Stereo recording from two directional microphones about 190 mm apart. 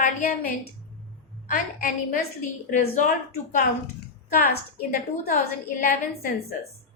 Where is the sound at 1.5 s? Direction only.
45° left (ahead or behind).